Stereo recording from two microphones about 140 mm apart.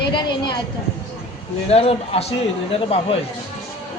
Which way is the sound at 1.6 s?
45° left (ahead or behind).